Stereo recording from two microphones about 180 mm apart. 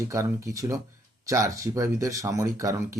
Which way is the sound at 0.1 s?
15° right (ahead or behind).